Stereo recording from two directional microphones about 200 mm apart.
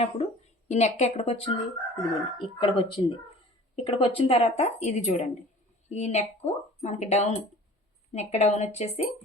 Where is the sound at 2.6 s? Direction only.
25° left (ahead or behind).